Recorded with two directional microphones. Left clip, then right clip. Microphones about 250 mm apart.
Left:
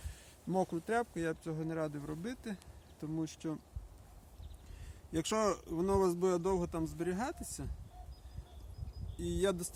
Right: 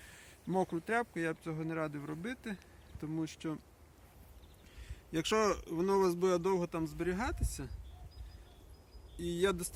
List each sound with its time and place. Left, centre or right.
0.4 s speech: centre
5.1 s speech: centre
9.1 s speech: centre